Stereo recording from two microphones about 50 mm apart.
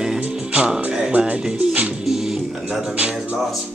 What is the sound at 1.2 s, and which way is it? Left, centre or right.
Speech, centre.